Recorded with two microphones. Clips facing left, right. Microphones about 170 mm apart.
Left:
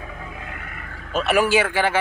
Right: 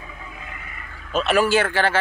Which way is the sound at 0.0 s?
55° left (ahead or behind).